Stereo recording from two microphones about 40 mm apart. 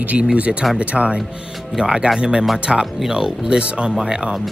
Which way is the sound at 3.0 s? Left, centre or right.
Centre.